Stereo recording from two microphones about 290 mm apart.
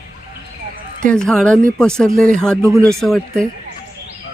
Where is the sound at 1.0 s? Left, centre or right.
Centre.